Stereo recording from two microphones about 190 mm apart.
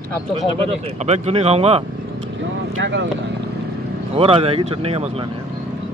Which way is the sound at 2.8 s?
70° right (ahead or behind).